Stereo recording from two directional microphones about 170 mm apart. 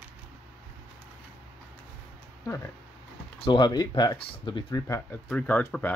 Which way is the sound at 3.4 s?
25° left (ahead or behind).